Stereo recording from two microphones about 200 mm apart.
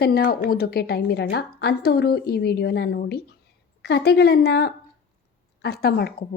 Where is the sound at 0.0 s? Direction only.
50° left (ahead or behind).